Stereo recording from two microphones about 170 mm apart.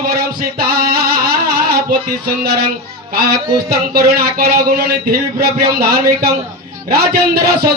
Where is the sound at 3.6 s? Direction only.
65° right (ahead or behind).